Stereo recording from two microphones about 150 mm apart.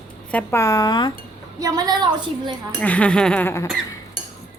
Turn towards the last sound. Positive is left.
turn(degrees=15)  # may be behind; listen again after turning